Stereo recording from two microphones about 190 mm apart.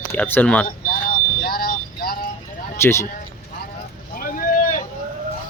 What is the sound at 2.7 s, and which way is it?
Speech, 15° left (ahead or behind).